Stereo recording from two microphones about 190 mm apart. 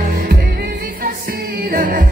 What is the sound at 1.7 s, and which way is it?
Music, 50° right (ahead or behind).